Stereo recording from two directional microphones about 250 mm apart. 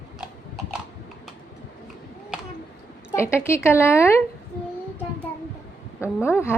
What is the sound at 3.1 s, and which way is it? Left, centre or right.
A woman's voice, centre.